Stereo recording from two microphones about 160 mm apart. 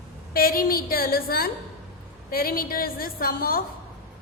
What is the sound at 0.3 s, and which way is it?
A woman's voice, 65° left (ahead or behind).